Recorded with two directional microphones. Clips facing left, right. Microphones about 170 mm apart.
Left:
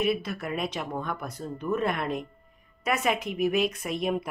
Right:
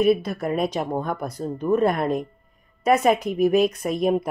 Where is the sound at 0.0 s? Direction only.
40° right (ahead or behind).